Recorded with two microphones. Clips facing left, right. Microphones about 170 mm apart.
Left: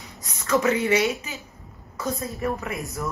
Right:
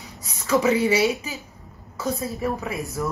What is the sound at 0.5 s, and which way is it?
Speech, 15° right (ahead or behind).